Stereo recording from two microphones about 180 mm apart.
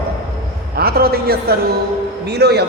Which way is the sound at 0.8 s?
60° right (ahead or behind).